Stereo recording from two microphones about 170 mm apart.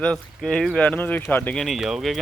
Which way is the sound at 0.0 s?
5° left (ahead or behind).